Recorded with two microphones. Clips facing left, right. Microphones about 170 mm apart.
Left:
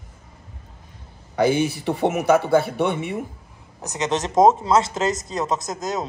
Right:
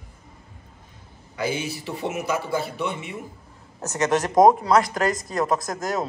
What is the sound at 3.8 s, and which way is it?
Speech, 15° left (ahead or behind).